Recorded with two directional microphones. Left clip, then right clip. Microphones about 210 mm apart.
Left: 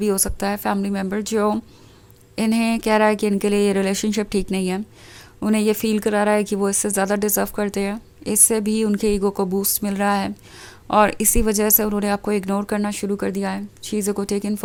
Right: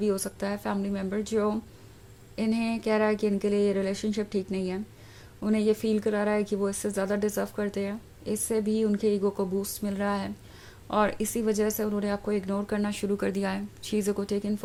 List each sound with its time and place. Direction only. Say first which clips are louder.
0.0 s speech: left 7 dB; 35° left (ahead or behind)